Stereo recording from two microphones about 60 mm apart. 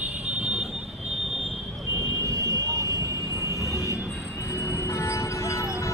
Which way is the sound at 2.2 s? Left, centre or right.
Right.